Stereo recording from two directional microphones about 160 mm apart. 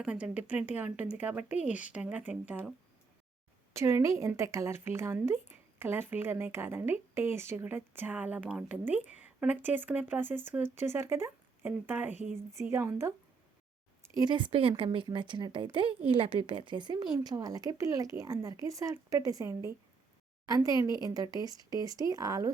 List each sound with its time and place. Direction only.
0.0 s a woman's voice: 5° right (ahead or behind)
14.2 s speech: 30° right (ahead or behind)